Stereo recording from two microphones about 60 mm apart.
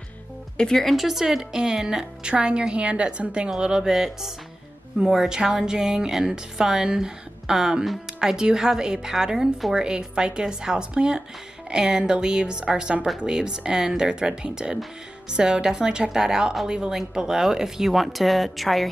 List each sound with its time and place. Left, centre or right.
0.6 s speech: centre